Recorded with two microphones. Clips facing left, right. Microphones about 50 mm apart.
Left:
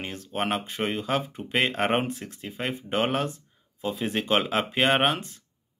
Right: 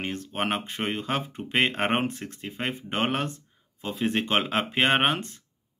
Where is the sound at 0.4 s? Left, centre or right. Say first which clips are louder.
Left 2 dB; right.